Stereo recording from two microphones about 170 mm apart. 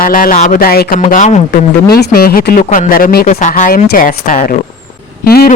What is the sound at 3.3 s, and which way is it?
Speech, 45° left (ahead or behind).